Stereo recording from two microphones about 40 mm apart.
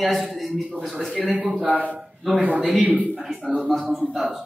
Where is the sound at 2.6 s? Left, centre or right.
Centre.